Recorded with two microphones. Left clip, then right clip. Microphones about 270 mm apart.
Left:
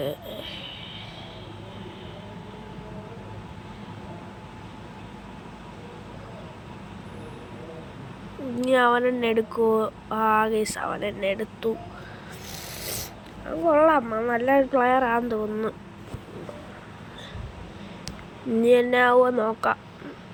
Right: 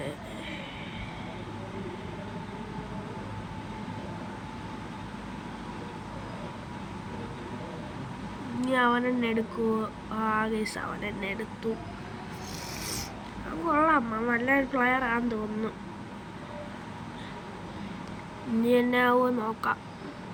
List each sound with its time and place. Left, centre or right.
8.6 s speech: centre
12.8 s rub: centre
13.7 s speech: centre
18.6 s speech: centre